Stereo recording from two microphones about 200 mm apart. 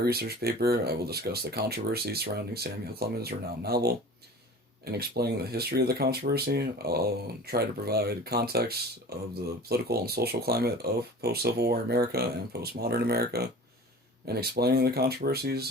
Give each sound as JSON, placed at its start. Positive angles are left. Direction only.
{"t": 0.0, "sound": "speech", "side_deg": -50}